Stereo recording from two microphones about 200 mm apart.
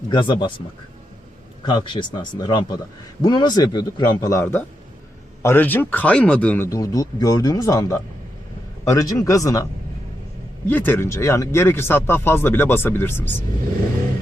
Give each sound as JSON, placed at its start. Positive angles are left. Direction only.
{"t": 0.1, "sound": "speech", "side_deg": 25}
{"t": 1.6, "sound": "speech", "side_deg": 20}
{"t": 10.7, "sound": "speech", "side_deg": 10}